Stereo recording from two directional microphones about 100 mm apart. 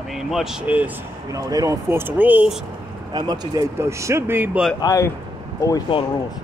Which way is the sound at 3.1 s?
45° right (ahead or behind).